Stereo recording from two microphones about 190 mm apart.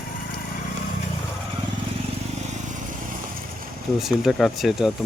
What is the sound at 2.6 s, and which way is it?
Vehicle, 40° right (ahead or behind).